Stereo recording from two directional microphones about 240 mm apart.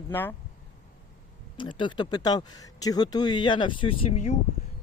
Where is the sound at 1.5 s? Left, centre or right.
Centre.